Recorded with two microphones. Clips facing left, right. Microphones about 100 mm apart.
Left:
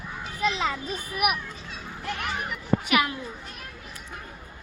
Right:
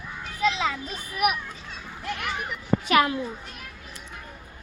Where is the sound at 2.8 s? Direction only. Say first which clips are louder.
Right 6 dB; 30° right (ahead or behind).